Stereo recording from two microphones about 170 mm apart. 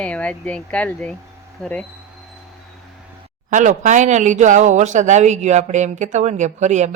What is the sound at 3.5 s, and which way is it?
Speech, 45° right (ahead or behind).